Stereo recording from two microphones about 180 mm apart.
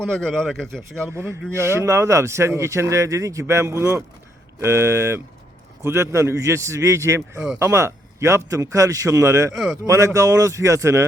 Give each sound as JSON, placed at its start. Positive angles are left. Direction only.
{"t": 0.0, "sound": "speech", "side_deg": 5}
{"t": 0.8, "sound": "speech", "side_deg": -15}